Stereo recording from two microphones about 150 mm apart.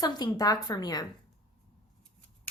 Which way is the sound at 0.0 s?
30° left (ahead or behind).